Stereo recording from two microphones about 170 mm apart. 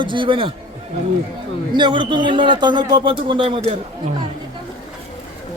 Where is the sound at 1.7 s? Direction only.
30° right (ahead or behind).